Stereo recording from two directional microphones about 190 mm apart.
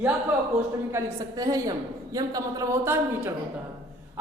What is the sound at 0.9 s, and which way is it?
A woman's voice, 15° right (ahead or behind).